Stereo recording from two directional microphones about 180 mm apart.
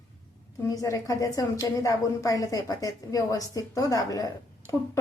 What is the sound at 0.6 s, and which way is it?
A woman's voice, 15° left (ahead or behind).